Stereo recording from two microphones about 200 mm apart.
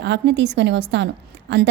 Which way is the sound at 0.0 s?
60° right (ahead or behind).